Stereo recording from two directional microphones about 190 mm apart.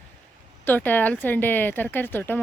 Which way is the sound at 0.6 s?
10° left (ahead or behind).